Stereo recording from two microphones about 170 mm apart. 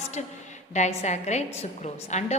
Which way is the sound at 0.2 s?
40° left (ahead or behind).